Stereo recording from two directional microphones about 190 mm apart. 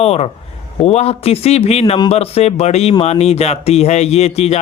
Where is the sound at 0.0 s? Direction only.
30° left (ahead or behind).